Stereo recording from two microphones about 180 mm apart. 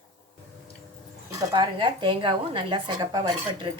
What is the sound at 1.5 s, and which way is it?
A woman's voice, 30° right (ahead or behind).